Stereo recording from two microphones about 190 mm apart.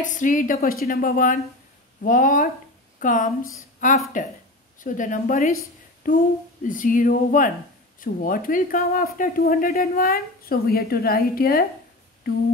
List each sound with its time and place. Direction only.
0.0 s a woman's voice: 40° left (ahead or behind)